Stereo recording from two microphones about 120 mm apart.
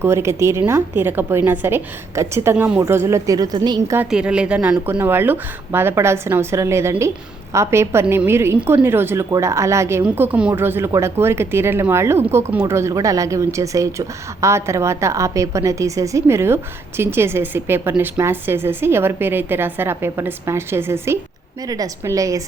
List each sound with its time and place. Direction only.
0.0 s speech: 20° right (ahead or behind)
4.1 s speech: 10° right (ahead or behind); by 10.0 s 25° right (ahead or behind)
10.0 s speech: 10° right (ahead or behind); by 22.4 s 30° right (ahead or behind)